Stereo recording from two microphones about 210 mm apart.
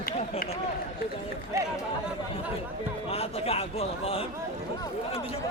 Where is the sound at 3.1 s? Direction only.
30° left (ahead or behind).